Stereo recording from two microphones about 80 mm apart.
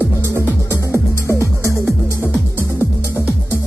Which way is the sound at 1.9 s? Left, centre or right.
Right.